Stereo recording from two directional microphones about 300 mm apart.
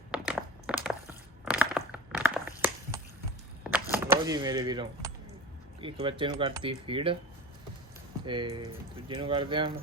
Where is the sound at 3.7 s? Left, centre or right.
Centre.